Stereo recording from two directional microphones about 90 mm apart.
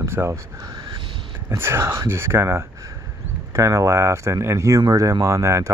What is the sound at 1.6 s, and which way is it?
Speech, 30° right (ahead or behind).